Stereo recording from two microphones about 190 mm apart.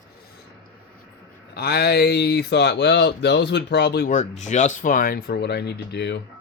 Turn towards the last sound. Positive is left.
turn(degrees=60)  # may be behind; listen again after turning